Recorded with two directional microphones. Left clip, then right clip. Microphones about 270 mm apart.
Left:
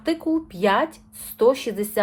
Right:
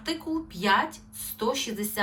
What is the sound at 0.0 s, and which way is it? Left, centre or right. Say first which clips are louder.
A woman's voice: left 8 dB; left.